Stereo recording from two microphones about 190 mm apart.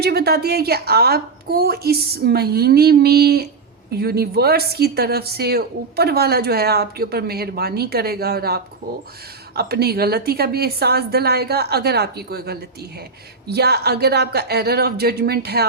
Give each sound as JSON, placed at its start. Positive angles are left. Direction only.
{"t": 0.0, "sound": "speech", "side_deg": -55}